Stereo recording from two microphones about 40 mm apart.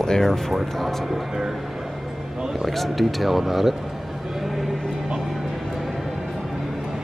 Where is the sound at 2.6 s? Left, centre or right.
Centre.